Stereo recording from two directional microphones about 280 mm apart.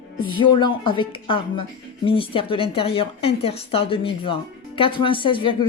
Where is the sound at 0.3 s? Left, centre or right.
Centre.